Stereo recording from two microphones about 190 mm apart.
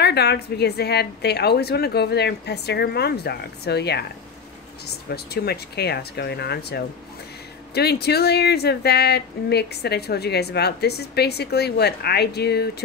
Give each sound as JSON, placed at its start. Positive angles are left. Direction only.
{"t": 0.0, "sound": "speech", "side_deg": 60}